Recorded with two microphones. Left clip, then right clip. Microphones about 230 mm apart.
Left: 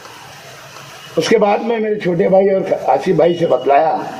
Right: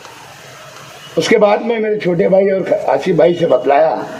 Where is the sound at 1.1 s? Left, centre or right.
Right.